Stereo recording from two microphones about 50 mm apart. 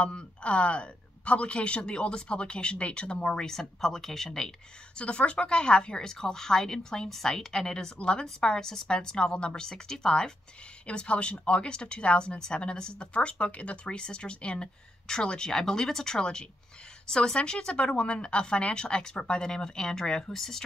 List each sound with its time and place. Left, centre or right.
0.0 s speech: left
3.4 s a woman's voice: centre
4.9 s a woman's voice: left